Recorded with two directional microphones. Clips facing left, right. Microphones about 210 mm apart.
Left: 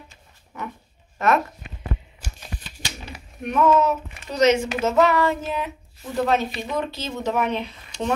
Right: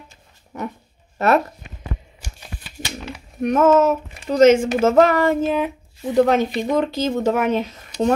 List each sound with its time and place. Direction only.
0.5 s dog: 40° right (ahead or behind)
1.1 s a sound: 35° right (ahead or behind)
3.4 s speech: 45° right (ahead or behind)